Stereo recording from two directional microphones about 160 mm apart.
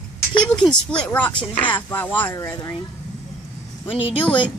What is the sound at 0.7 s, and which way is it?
Speech, 5° left (ahead or behind).